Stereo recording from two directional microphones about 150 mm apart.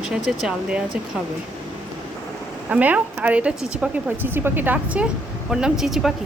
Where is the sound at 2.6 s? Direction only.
10° right (ahead or behind).